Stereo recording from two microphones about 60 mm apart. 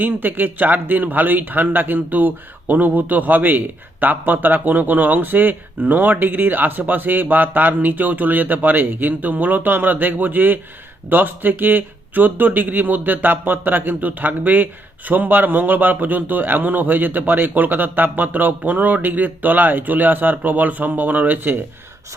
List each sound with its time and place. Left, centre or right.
0.0 s speech: right